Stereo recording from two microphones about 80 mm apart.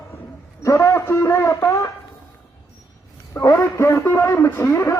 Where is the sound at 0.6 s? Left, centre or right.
Left.